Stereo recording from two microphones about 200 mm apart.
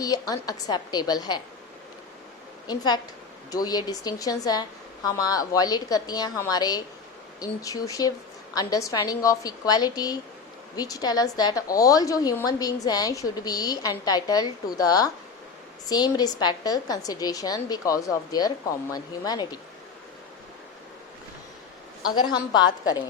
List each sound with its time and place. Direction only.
0.0 s a woman's voice: 20° left (ahead or behind)
2.6 s a woman's voice: 20° left (ahead or behind)
22.1 s a woman's voice: 20° left (ahead or behind)